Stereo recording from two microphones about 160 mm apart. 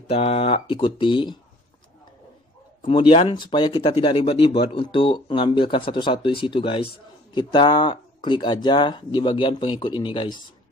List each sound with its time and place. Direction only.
0.1 s speech: 40° left (ahead or behind)
2.8 s speech: 30° left (ahead or behind)